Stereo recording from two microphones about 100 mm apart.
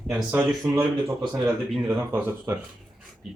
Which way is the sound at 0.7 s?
35° right (ahead or behind).